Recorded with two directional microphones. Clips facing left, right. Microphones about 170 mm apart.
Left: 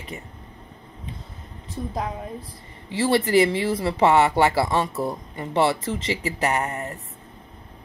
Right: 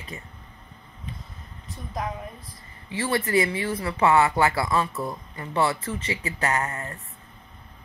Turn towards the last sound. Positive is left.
turn(degrees=20)  # may be behind; listen again after turning